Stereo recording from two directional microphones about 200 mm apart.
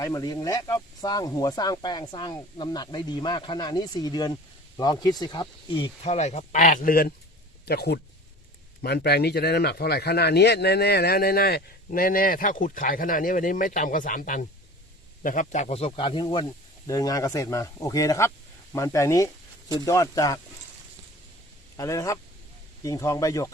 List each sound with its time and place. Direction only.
0.0 s speech: 20° left (ahead or behind)
21.8 s speech: 15° left (ahead or behind)